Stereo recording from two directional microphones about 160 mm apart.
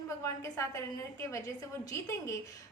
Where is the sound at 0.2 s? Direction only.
20° left (ahead or behind).